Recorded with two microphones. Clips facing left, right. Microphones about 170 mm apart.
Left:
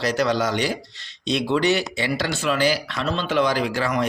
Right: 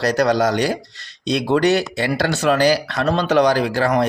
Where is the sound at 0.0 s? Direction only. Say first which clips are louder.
Right 4 dB; 40° right (ahead or behind).